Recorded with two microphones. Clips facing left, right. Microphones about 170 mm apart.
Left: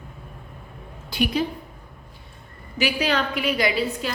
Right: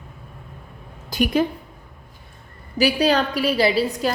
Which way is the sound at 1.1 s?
45° right (ahead or behind).